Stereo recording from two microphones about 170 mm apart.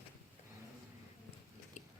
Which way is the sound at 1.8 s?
45° left (ahead or behind).